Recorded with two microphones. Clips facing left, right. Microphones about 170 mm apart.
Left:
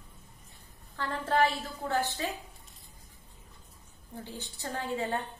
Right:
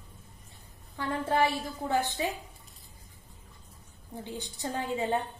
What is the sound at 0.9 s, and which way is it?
A woman's voice, 15° right (ahead or behind).